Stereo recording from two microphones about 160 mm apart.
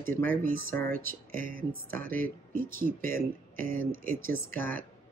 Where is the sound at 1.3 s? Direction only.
60° right (ahead or behind).